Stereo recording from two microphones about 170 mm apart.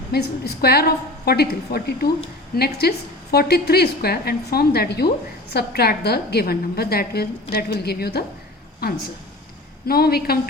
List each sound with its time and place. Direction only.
0.1 s a woman's voice: 70° left (ahead or behind)
9.8 s a woman's voice: 65° left (ahead or behind)